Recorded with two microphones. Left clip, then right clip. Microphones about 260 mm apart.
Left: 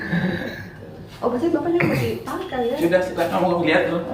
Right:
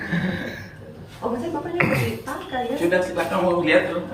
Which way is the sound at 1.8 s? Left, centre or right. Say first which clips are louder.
Even; centre.